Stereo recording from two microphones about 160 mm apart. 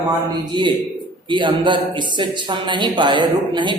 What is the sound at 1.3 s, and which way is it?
Speech, 30° right (ahead or behind).